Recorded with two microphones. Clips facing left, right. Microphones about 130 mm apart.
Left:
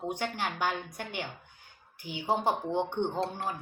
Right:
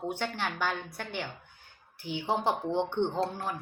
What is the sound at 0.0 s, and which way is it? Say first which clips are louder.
A woman's voice: even; 15° left (ahead or behind).